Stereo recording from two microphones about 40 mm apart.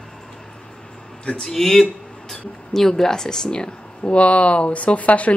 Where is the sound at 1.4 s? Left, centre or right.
Centre.